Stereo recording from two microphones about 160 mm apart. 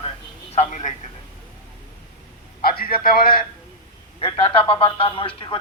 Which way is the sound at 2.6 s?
65° left (ahead or behind).